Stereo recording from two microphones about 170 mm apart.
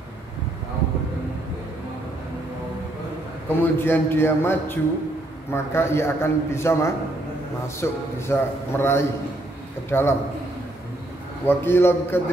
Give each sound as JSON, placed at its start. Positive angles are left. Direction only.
{"t": 3.4, "sound": "a man's voice", "side_deg": 15}
{"t": 11.4, "sound": "a man's voice", "side_deg": 15}